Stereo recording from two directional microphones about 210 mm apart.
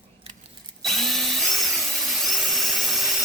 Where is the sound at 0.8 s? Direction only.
Centre (ahead or behind).